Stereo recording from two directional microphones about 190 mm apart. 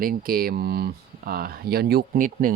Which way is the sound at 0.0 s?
50° right (ahead or behind).